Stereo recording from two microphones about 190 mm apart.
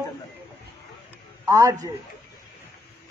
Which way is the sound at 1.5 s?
15° right (ahead or behind).